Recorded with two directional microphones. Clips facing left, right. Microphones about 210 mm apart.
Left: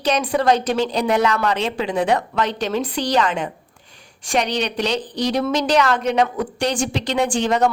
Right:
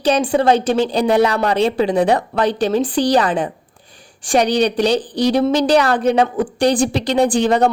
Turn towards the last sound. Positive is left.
turn(degrees=-35)  # may be behind; listen again after turning